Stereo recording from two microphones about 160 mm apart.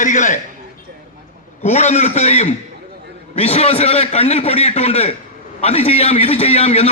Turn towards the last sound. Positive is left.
turn(degrees=40)  # may be behind; listen again after turning